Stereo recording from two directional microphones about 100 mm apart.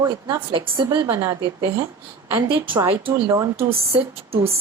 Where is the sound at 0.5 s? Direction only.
60° right (ahead or behind).